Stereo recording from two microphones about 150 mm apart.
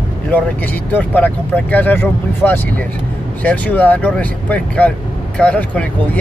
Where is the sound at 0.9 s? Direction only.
10° left (ahead or behind).